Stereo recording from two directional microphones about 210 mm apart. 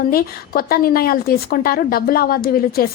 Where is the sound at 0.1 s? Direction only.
45° left (ahead or behind).